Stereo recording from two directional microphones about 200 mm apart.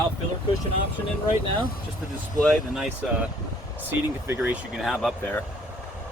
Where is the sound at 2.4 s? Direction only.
Centre (ahead or behind).